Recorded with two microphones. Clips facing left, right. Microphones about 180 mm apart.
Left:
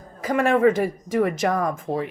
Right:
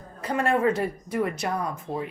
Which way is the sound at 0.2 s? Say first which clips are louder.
Left 5 dB; 90° left.